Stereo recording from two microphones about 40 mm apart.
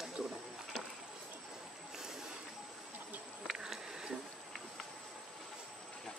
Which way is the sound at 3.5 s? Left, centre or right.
Centre.